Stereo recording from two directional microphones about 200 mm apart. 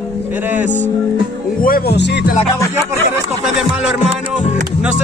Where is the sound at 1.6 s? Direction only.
50° left (ahead or behind).